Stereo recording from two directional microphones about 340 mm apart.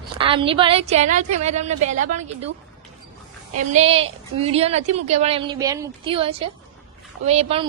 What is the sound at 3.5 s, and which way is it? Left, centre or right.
A woman's voice, centre.